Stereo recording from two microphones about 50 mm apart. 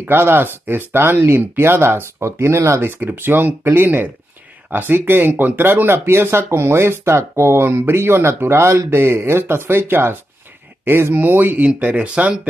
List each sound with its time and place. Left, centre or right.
0.1 s speech: right
2.8 s speech: right
11.1 s speech: right
11.6 s speech: right